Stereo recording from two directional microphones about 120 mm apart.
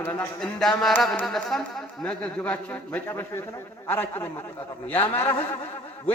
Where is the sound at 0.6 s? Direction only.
Centre (ahead or behind).